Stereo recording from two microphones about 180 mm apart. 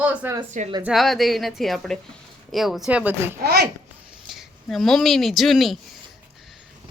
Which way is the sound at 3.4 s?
65° right (ahead or behind).